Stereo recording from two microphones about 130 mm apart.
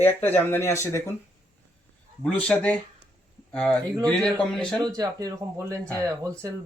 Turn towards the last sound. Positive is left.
turn(degrees=-20)  # may be behind; listen again after turning